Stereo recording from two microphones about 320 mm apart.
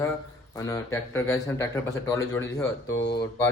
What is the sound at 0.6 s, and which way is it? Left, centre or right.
A man's voice, centre.